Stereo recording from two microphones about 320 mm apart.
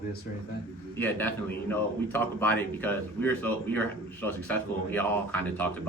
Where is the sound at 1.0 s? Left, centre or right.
Centre.